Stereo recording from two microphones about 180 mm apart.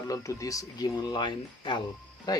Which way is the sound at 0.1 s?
20° left (ahead or behind).